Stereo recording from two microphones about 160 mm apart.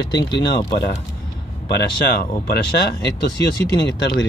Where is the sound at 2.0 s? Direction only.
80° left.